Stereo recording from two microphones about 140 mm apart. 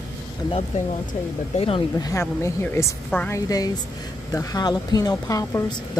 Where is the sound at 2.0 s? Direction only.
25° left (ahead or behind).